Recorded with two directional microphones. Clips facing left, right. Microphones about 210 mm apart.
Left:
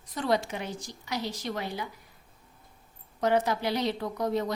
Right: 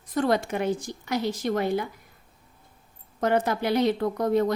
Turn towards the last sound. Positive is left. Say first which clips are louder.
# right 6 dB
turn(degrees=-55)  # may be behind; listen again after turning